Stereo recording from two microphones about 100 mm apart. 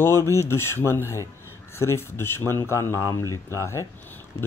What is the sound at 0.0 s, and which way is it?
A man's voice, 25° left (ahead or behind).